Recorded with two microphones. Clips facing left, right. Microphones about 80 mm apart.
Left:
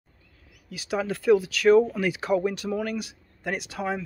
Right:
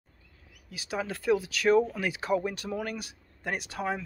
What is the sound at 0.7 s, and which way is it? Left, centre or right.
Speech, right.